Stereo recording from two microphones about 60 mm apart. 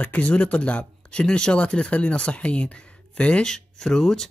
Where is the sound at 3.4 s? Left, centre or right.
Centre.